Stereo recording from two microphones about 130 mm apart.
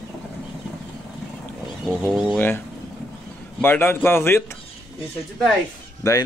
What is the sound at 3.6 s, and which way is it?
Speech, 15° left (ahead or behind).